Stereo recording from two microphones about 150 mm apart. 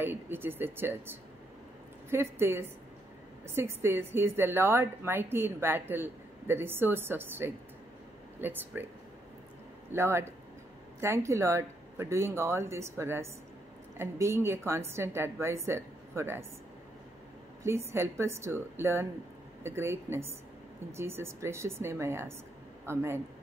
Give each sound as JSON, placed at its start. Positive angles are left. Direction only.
{"t": 0.0, "sound": "a woman's voice", "side_deg": -15}
{"t": 2.0, "sound": "a woman's voice", "side_deg": -15}
{"t": 9.9, "sound": "a woman's voice", "side_deg": -15}
{"t": 17.6, "sound": "a woman's voice", "side_deg": -15}